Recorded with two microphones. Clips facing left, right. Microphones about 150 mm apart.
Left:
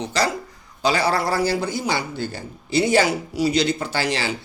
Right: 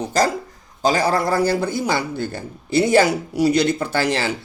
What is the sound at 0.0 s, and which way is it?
A man's voice, 45° right (ahead or behind).